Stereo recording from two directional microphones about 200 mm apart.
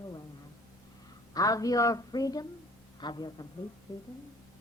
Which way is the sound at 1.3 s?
15° left (ahead or behind).